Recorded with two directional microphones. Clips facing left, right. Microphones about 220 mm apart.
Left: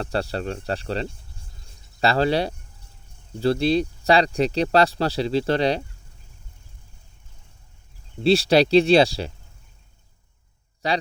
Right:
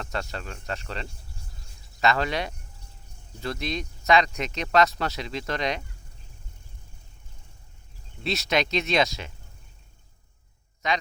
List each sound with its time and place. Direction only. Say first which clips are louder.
0.0 s speech: left 8 dB; 35° left (ahead or behind)
8.2 s speech: left 10 dB; 30° left (ahead or behind)
10.8 s speech: left 4 dB; 35° left (ahead or behind)